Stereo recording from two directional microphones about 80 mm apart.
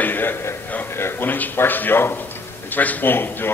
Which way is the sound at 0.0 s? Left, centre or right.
Left.